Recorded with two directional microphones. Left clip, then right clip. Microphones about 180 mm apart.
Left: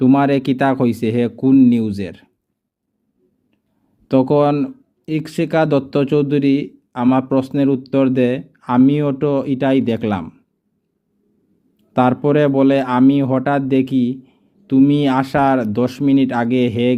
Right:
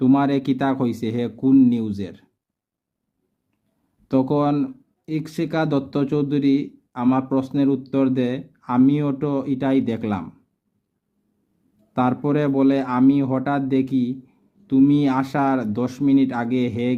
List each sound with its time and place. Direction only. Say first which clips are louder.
0.0 s speech: left 5 dB; 30° left (ahead or behind)
4.1 s speech: left 6 dB; 30° left (ahead or behind)
11.9 s speech: left 7 dB; 30° left (ahead or behind)